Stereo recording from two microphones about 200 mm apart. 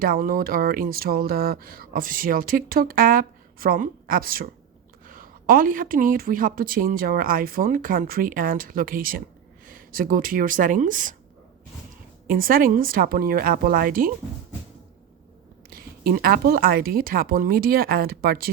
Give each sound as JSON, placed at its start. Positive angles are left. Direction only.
{"t": 0.0, "sound": "speech", "side_deg": -45}
{"t": 12.3, "sound": "speech", "side_deg": -45}
{"t": 15.7, "sound": "speech", "side_deg": -45}